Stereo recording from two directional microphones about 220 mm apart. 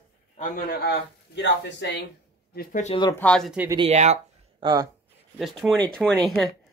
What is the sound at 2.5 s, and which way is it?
Speech, 40° left (ahead or behind).